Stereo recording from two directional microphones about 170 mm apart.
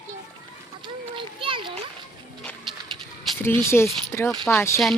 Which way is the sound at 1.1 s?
30° right (ahead or behind).